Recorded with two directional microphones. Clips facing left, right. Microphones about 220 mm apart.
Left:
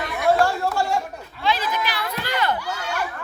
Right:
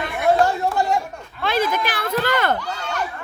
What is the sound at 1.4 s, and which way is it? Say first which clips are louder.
Speech: right 3 dB; 50° right (ahead or behind).